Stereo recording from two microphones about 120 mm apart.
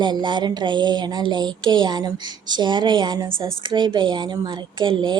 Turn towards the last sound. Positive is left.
turn(degrees=-40)  # may be behind; listen again after turning